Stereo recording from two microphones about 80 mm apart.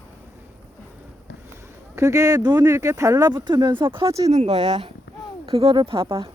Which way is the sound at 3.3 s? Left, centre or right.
Right.